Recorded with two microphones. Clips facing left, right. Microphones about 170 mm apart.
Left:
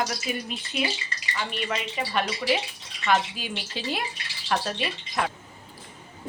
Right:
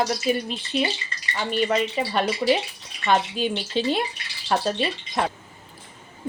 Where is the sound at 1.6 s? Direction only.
30° right (ahead or behind).